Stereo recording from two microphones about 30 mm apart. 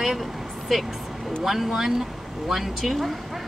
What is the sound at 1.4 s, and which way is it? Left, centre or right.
Speech, centre.